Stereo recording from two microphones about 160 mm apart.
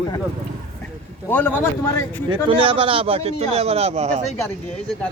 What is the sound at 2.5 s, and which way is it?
A man's voice, 35° right (ahead or behind).